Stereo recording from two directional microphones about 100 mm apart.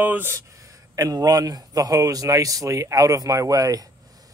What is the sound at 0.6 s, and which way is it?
Speech, 35° right (ahead or behind).